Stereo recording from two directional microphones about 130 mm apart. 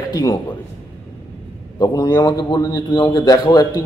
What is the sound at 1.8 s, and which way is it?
A man's voice, 30° left (ahead or behind).